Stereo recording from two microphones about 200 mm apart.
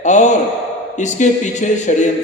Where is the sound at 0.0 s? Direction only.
35° left (ahead or behind).